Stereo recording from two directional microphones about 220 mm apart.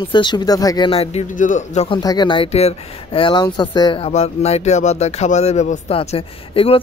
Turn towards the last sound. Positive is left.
turn(degrees=25)  # may be behind; listen again after turning